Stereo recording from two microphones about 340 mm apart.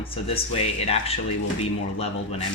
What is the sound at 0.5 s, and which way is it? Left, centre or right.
Speech, centre.